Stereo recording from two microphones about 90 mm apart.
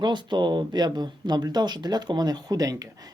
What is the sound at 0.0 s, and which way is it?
Speech, 55° right (ahead or behind).